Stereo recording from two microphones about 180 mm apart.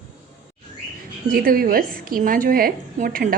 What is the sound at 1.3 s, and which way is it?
A woman's voice, 55° right (ahead or behind).